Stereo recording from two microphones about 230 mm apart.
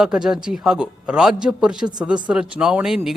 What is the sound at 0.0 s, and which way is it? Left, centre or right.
Speech, centre.